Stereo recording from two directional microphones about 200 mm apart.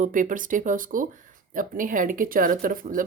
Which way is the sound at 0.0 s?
40° right (ahead or behind).